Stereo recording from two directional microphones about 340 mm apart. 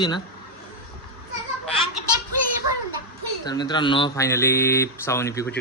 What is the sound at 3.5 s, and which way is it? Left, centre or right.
Speech, centre.